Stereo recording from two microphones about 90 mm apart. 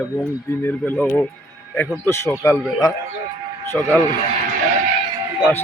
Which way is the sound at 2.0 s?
30° left (ahead or behind).